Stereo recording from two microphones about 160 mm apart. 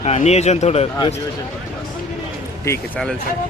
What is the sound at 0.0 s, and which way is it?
Speech, 45° left (ahead or behind).